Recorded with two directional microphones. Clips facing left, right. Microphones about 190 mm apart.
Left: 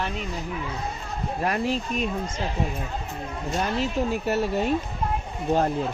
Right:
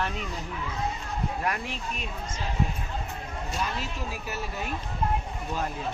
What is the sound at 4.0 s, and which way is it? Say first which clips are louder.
Speech: left 11 dB; 60° left (ahead or behind).